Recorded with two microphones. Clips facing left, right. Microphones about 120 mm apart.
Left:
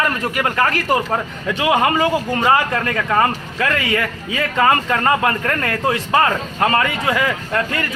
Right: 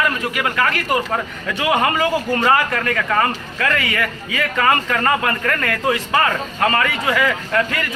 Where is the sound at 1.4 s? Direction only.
20° left (ahead or behind).